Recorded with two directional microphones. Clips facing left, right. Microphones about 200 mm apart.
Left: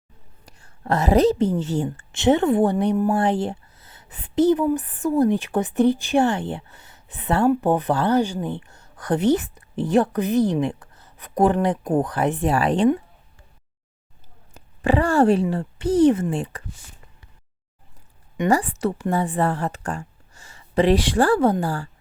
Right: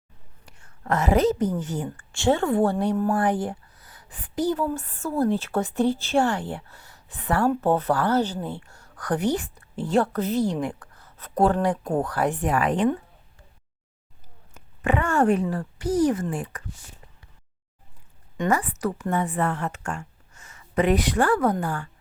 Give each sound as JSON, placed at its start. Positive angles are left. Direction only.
{"t": 0.4, "sound": "a woman's voice", "side_deg": 35}
{"t": 3.2, "sound": "speech", "side_deg": 25}
{"t": 14.5, "sound": "speech", "side_deg": 35}
{"t": 18.4, "sound": "a woman's voice", "side_deg": 30}